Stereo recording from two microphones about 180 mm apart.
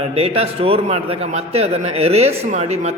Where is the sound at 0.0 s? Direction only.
35° right (ahead or behind).